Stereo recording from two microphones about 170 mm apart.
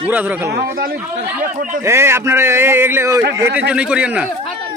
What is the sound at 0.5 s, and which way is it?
Speech, 60° right (ahead or behind).